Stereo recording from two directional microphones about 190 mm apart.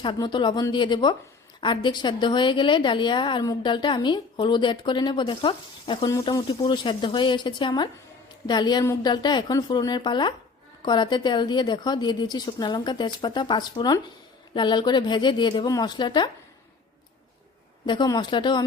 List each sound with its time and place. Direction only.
0.0 s a woman's voice: 25° left (ahead or behind)
17.8 s a woman's voice: 20° left (ahead or behind)